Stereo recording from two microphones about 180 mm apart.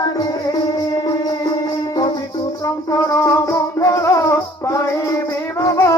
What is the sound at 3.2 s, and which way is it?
Music, 20° left (ahead or behind).